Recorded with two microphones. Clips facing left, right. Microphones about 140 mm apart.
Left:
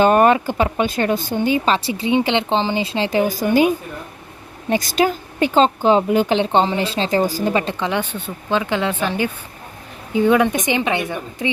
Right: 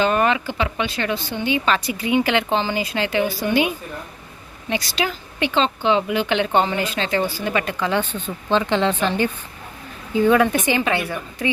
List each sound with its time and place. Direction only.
0.0 s speech: 45° left (ahead or behind)
4.7 s speech: 45° left (ahead or behind); by 11.5 s 20° left (ahead or behind)